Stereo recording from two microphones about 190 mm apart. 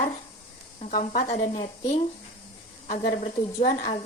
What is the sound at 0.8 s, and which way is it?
Speech, 40° left (ahead or behind).